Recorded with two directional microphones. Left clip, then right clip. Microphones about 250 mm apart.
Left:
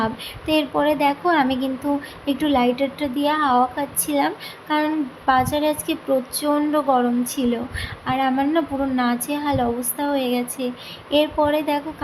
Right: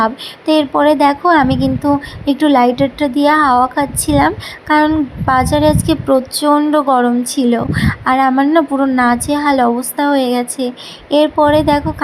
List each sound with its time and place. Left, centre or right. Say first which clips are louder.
0.0 s speech: right 9 dB; right